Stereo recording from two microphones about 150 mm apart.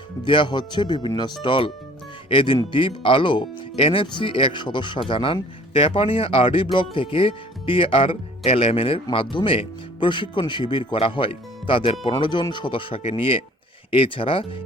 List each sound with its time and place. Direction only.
0.3 s speech: 30° left (ahead or behind)